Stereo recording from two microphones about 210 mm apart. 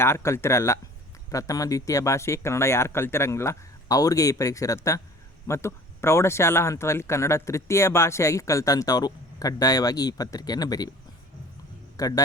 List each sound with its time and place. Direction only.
0.0 s speech: 15° left (ahead or behind)
11.9 s speech: 15° left (ahead or behind)